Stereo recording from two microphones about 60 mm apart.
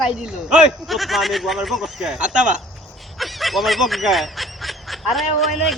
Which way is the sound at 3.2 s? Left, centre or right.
Centre.